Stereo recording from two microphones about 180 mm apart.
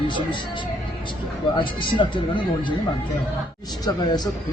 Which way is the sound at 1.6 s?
25° left (ahead or behind).